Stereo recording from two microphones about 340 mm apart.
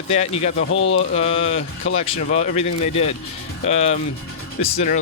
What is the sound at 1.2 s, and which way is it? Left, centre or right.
Speech, centre.